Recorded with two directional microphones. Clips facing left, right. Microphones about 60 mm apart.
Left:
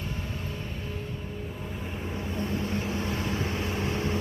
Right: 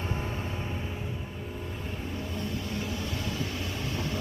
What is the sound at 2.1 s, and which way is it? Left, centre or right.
Vehicle, left.